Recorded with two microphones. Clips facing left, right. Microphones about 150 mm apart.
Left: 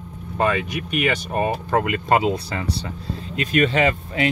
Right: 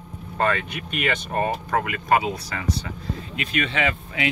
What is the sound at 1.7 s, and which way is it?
Speech, 30° left (ahead or behind).